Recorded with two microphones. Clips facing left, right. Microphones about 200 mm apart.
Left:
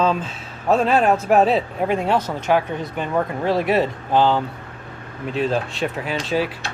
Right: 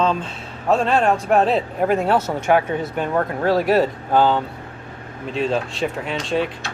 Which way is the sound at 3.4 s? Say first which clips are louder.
Right 3 dB; centre (ahead or behind).